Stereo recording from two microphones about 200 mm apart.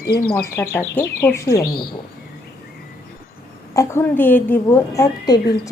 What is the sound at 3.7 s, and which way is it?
A woman's voice, 15° left (ahead or behind).